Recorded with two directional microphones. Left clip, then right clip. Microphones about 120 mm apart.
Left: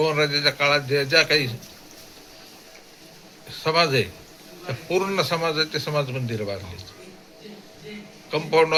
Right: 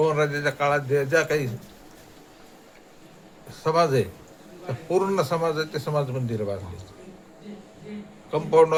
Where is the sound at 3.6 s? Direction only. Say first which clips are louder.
Left 1 dB; 20° right (ahead or behind).